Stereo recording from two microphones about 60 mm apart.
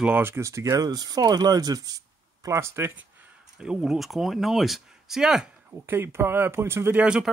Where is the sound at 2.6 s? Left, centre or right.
Right.